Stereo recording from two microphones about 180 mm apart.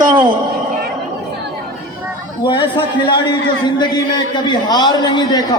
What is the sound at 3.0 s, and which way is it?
A man's voice, 25° left (ahead or behind).